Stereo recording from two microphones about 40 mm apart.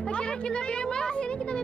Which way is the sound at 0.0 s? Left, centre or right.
Left.